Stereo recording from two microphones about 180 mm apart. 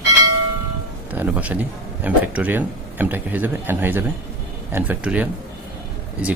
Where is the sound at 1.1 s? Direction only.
10° right (ahead or behind).